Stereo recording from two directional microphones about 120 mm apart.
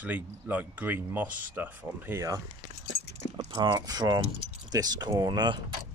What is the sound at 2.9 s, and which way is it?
Keys jangling, 20° left (ahead or behind).